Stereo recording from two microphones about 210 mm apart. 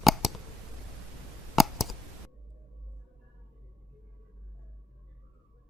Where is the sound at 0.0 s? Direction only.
Centre (ahead or behind).